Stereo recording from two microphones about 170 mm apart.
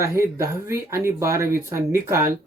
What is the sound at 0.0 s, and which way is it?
Speech, 15° right (ahead or behind).